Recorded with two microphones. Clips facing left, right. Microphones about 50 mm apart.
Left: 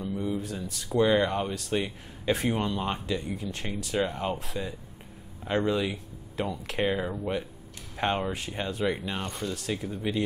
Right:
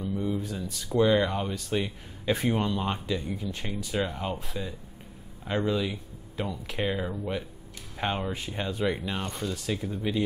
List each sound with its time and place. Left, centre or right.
0.0 s a sound: centre
0.6 s speech: centre
6.3 s speech: left
6.8 s speech: centre
8.3 s speech: centre